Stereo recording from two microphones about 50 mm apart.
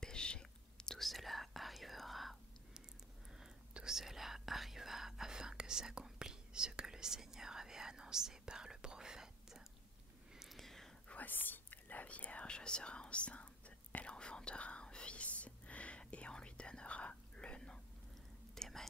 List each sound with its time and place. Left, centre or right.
0.0 s whispering: centre
1.0 s whispering: centre
3.3 s whispering: centre
10.6 s whispering: centre
11.1 s whispering: left; by 17.7 s centre
18.5 s whispering: centre